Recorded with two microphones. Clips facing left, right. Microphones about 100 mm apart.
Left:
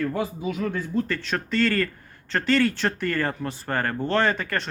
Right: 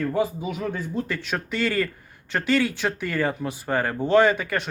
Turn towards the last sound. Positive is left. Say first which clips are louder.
# right 5 dB
turn(degrees=-5)  # may be behind; listen again after turning